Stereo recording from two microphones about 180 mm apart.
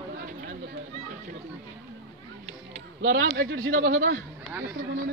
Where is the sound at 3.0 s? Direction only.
70° right (ahead or behind).